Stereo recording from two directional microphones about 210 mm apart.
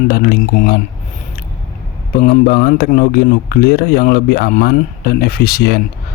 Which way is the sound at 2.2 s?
40° left (ahead or behind).